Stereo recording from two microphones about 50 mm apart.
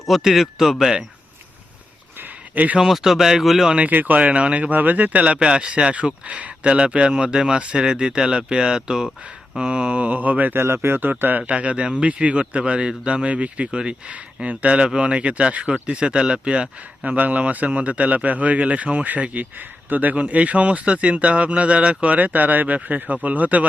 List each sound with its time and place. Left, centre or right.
0.2 s speech: centre
2.7 s speech: centre
3.8 s speech: right; by 9.0 s centre
9.6 s mantra: right
10.6 s speech: right
11.1 s mantra: right
11.4 s speech: right